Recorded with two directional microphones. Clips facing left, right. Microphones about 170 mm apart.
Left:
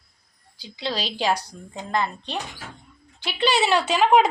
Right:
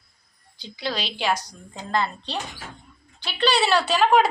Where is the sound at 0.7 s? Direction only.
25° left (ahead or behind).